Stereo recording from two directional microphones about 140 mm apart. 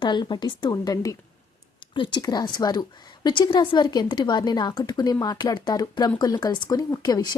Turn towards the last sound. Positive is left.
turn(degrees=30)  # may be behind; listen again after turning